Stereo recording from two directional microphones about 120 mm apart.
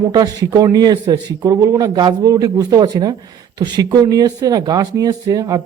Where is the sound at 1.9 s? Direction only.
40° right (ahead or behind).